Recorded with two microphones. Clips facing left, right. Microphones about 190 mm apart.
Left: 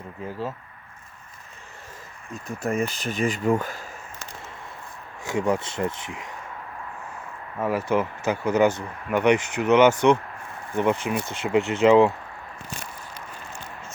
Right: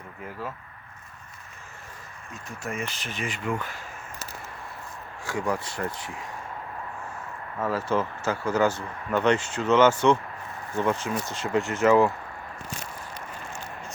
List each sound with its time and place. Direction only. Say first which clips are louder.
0.2 s speech: left 5 dB; 30° left (ahead or behind)
2.6 s speech: left 8 dB; 35° left (ahead or behind)
5.2 s speech: left 4 dB; 20° left (ahead or behind)
7.6 s speech: left 3 dB; 15° left (ahead or behind)